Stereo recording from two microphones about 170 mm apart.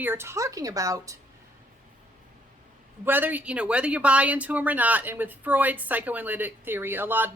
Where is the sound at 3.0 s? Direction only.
10° right (ahead or behind).